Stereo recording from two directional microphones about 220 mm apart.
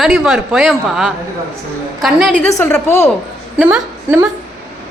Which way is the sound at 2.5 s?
10° left (ahead or behind).